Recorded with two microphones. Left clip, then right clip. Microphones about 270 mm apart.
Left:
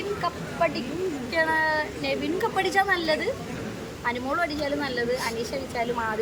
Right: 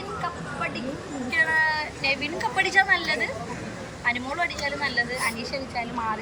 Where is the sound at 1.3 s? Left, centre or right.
Centre.